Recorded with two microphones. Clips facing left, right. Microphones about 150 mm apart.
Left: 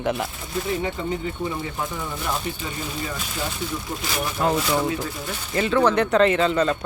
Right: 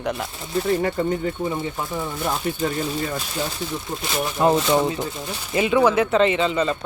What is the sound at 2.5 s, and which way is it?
Speech, 50° right (ahead or behind).